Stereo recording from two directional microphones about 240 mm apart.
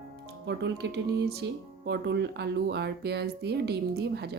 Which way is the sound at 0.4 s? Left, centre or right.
Right.